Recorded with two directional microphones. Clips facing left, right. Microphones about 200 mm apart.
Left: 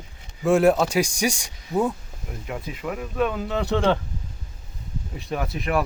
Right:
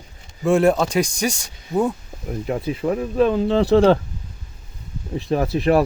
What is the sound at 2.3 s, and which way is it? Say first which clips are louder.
Speech: right 9 dB; 40° right (ahead or behind).